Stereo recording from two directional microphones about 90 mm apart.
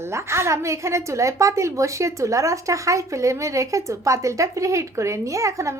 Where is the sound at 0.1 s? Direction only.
30° right (ahead or behind).